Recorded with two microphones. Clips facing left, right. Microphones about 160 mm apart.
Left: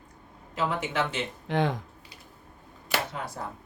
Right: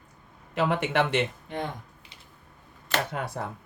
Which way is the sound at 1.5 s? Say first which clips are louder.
Left 6 dB; 90° left.